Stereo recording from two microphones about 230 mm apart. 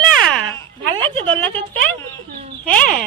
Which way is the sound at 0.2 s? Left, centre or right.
Centre.